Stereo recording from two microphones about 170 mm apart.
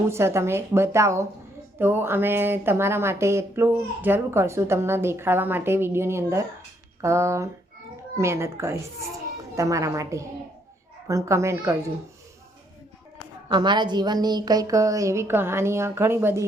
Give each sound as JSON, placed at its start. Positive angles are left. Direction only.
{"t": 0.1, "sound": "a woman's voice", "side_deg": -15}
{"t": 13.5, "sound": "a woman's voice", "side_deg": -25}